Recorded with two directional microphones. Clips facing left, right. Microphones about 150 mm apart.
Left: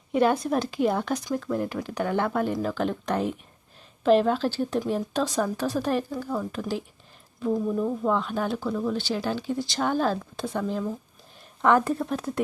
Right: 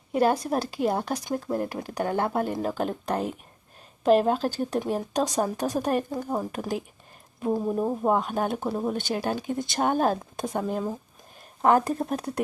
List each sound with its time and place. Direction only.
0.1 s speech: 40° right (ahead or behind)
7.5 s speech: 30° right (ahead or behind)
8.5 s speech: 30° right (ahead or behind)
8.9 s speech: 50° right (ahead or behind)